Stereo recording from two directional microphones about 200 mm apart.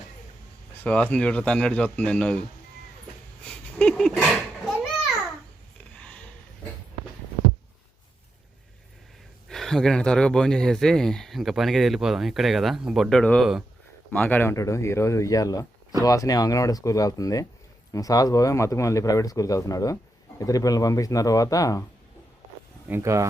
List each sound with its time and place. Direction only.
0.8 s speech: 5° left (ahead or behind)
3.4 s a sound: 5° left (ahead or behind)
9.5 s speech: centre (ahead or behind)
22.9 s speech: 15° right (ahead or behind)